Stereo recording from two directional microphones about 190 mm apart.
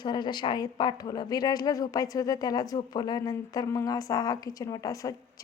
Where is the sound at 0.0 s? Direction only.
25° left (ahead or behind).